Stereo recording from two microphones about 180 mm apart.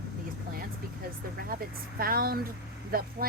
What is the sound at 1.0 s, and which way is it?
A woman's voice, 55° right (ahead or behind).